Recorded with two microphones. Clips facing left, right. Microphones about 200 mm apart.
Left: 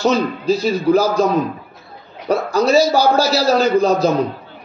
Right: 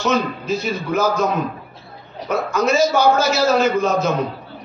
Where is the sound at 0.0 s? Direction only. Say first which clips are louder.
Left 4 dB; 35° left (ahead or behind).